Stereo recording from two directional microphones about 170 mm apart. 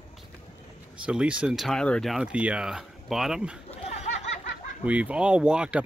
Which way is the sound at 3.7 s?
40° left (ahead or behind).